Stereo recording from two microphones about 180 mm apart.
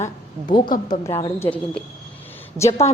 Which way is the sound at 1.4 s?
10° left (ahead or behind).